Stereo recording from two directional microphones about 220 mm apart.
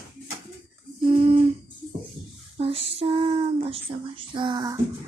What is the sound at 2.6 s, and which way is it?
Speech, 25° right (ahead or behind).